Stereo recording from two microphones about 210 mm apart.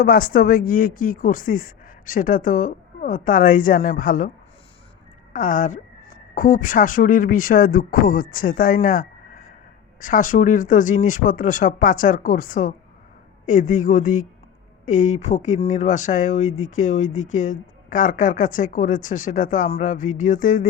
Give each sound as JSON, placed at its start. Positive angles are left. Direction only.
{"t": 0.0, "sound": "speech", "side_deg": 45}
{"t": 5.3, "sound": "speech", "side_deg": 40}